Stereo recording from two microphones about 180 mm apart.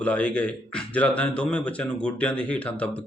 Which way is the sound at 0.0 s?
5° left (ahead or behind).